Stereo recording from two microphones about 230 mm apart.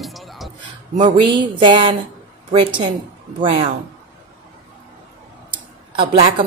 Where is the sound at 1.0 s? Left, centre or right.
Right.